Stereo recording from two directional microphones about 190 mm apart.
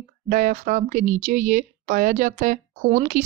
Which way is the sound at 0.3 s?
45° right (ahead or behind).